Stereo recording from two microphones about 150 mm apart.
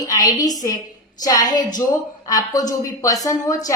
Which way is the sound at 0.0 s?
25° left (ahead or behind).